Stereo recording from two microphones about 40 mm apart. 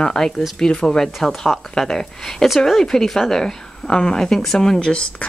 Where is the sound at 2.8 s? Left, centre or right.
Centre.